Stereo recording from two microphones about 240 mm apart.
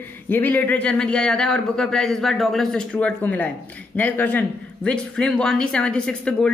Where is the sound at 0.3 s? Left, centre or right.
Centre.